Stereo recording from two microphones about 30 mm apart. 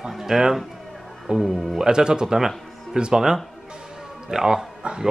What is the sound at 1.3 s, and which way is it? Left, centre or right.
Speech, right.